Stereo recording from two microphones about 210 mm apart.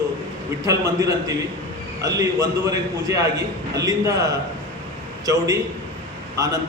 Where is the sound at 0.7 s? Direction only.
15° right (ahead or behind).